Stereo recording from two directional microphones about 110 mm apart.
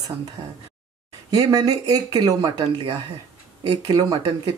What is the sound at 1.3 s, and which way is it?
Speech, 35° right (ahead or behind).